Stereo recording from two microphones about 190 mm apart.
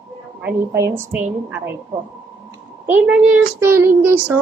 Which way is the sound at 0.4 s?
15° right (ahead or behind).